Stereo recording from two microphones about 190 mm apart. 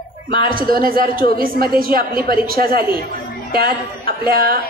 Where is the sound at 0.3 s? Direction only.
25° left (ahead or behind).